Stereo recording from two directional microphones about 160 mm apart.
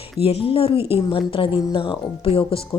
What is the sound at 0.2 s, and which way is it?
Speech, 35° left (ahead or behind).